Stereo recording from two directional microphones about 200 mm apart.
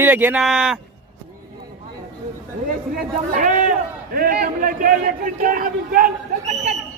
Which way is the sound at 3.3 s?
40° right (ahead or behind).